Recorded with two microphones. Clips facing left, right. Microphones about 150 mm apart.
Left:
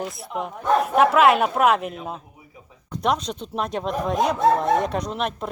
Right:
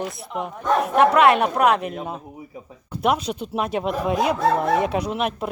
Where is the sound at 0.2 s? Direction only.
Centre (ahead or behind).